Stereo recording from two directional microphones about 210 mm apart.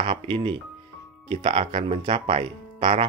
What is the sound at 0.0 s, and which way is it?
Speech, 25° right (ahead or behind).